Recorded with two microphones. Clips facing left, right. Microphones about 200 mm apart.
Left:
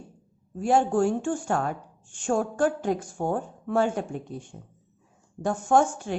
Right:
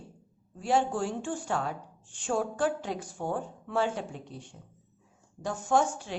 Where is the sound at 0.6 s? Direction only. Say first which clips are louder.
Left 6 dB; 50° left (ahead or behind).